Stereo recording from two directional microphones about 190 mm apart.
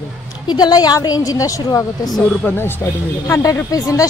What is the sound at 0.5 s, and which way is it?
A woman's voice, 20° left (ahead or behind).